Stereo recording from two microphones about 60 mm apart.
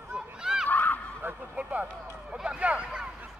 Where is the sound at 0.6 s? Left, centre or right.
Left.